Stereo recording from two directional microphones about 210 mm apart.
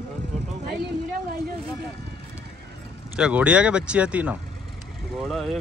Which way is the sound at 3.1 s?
5° right (ahead or behind).